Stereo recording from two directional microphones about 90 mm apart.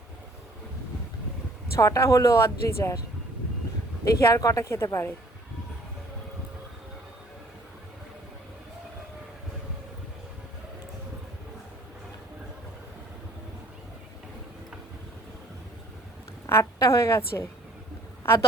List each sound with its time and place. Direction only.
1.7 s a woman's voice: 35° left (ahead or behind)
4.0 s a woman's voice: 40° left (ahead or behind)
16.5 s a woman's voice: 30° left (ahead or behind)